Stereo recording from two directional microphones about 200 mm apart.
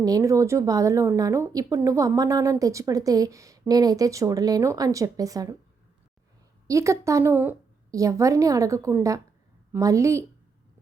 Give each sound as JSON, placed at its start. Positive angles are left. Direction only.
{"t": 0.0, "sound": "a woman's voice", "side_deg": -15}
{"t": 6.7, "sound": "a woman's voice", "side_deg": -15}